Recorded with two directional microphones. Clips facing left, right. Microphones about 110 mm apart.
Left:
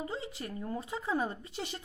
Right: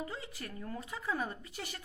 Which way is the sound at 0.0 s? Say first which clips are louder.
Left 4 dB; 25° left (ahead or behind).